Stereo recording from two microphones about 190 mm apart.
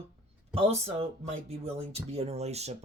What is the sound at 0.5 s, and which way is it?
Speech, 35° right (ahead or behind).